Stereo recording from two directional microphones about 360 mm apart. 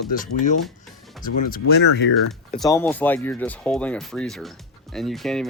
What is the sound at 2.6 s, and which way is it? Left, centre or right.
Speech, centre.